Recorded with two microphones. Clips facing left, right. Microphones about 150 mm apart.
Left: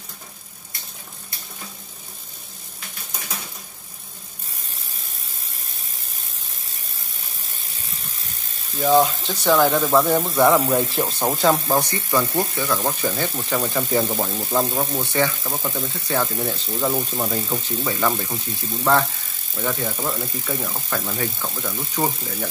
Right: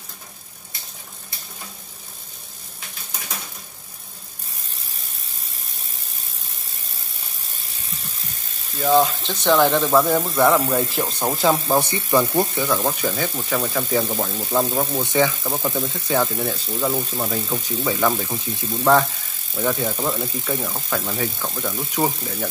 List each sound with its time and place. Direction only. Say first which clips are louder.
8.7 s speech: even; 5° left (ahead or behind)
11.9 s speech: right 3 dB; 15° right (ahead or behind)
13.0 s speech: even; centre (ahead or behind)
14.9 s speech: right 2 dB; 15° right (ahead or behind)
16.5 s speech: even; 5° left (ahead or behind)
21.9 s speech: right 1 dB; 10° right (ahead or behind)